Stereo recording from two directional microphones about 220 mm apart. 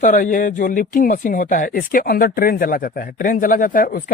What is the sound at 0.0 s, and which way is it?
Speech, 35° left (ahead or behind).